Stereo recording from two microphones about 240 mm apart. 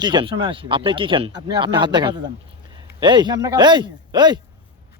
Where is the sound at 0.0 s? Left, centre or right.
Centre.